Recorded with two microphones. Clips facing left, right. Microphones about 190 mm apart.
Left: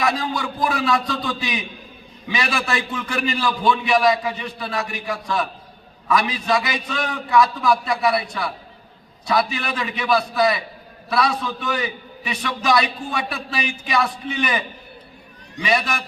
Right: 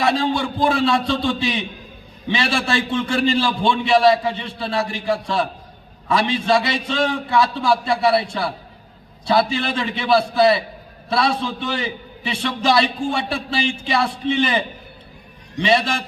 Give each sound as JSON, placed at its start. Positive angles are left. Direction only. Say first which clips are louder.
{"t": 0.0, "sound": "a man's voice", "louder": "right 4 dB", "side_deg": -30}